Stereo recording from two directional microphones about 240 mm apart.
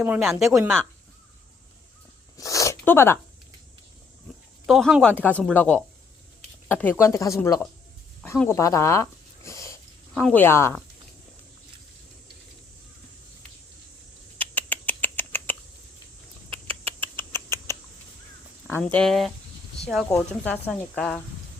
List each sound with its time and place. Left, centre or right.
0.0 s speech: centre
2.4 s zipper: centre
4.6 s speech: centre
8.2 s dog: centre
10.2 s speech: centre
14.3 s rodents: centre
17.0 s rodents: centre
18.7 s speech: centre